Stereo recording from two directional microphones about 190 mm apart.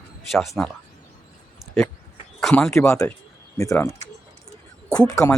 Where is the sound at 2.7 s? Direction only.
15° left (ahead or behind).